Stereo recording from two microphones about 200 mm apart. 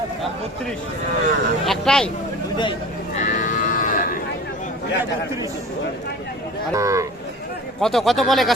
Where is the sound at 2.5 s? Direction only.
20° left (ahead or behind).